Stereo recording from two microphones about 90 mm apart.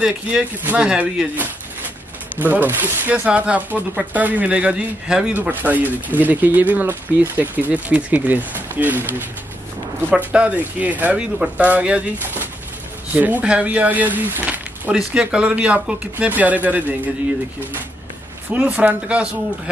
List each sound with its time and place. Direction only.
0.0 s speech: 10° right (ahead or behind)
10.1 s speech: 15° right (ahead or behind)
13.1 s speech: 15° right (ahead or behind)
14.9 s speech: 10° right (ahead or behind)
18.5 s speech: 15° right (ahead or behind)